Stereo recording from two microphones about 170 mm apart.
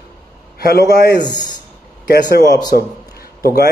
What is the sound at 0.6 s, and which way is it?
Speech, 65° left (ahead or behind).